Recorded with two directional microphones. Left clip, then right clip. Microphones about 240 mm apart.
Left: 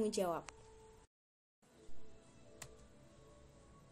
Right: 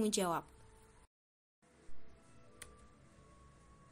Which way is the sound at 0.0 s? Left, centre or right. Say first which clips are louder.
Right 2 dB; right.